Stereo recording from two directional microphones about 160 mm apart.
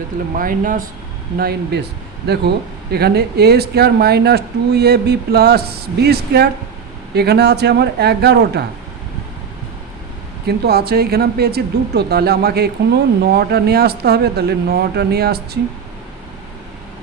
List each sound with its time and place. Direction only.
0.3 s speech: 60° right (ahead or behind)
1.4 s speech: 80° right
10.4 s speech: 80° right